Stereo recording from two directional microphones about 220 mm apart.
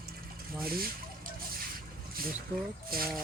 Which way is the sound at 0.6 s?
45° right (ahead or behind).